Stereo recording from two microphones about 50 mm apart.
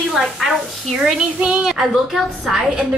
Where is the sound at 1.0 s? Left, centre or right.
Centre.